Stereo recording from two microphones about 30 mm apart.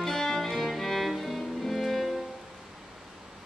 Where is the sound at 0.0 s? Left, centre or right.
Centre.